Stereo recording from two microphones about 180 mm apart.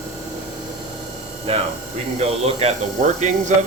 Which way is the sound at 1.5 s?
35° right (ahead or behind).